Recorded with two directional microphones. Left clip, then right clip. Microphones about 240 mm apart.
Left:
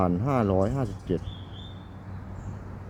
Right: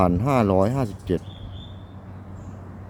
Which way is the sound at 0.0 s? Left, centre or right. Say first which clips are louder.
Right 5 dB; centre.